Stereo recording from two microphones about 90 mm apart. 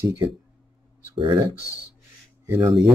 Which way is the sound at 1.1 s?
65° right (ahead or behind).